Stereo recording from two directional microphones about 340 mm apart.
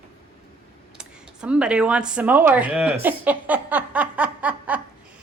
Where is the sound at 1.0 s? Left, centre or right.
Centre.